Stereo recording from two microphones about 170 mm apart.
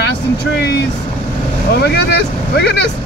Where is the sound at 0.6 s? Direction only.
75° left (ahead or behind).